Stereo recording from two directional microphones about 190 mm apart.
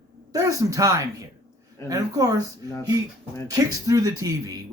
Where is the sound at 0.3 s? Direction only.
20° right (ahead or behind).